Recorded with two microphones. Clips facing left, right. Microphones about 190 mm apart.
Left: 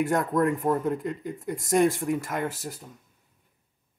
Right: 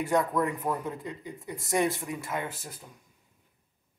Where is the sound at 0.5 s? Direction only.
50° left (ahead or behind).